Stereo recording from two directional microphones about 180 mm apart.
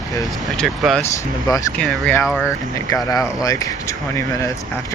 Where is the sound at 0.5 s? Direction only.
Centre (ahead or behind).